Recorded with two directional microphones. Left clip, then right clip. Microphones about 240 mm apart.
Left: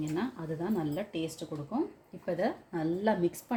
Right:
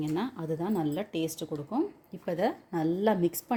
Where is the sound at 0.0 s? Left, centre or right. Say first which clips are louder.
Right 2 dB; right.